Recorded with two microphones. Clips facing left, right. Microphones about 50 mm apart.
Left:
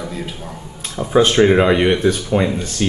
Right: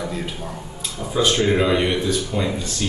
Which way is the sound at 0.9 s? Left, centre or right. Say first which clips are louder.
Left 7 dB; left.